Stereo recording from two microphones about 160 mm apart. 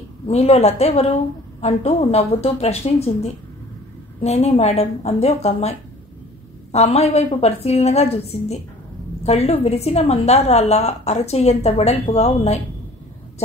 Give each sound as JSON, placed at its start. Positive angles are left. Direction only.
{"t": 0.3, "sound": "a woman's voice", "side_deg": 40}
{"t": 4.2, "sound": "a woman's voice", "side_deg": 40}